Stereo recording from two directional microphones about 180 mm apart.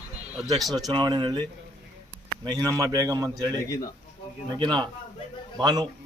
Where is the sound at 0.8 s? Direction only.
25° right (ahead or behind).